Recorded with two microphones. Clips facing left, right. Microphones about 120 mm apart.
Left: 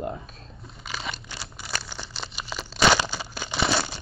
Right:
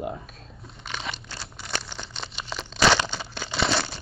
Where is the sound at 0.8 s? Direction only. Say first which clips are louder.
Even; centre (ahead or behind).